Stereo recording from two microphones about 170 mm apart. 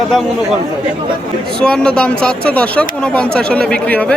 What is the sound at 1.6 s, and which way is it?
Speech, 5° left (ahead or behind).